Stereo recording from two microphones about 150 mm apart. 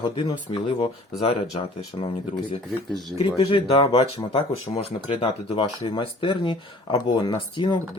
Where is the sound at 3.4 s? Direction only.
35° left (ahead or behind).